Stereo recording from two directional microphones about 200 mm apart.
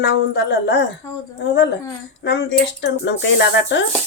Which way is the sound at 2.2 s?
60° left (ahead or behind).